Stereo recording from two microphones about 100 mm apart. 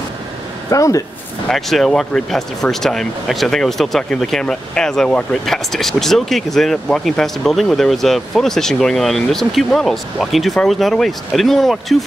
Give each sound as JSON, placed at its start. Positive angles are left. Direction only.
{"t": 0.7, "sound": "speech", "side_deg": 30}
{"t": 1.5, "sound": "speech", "side_deg": 5}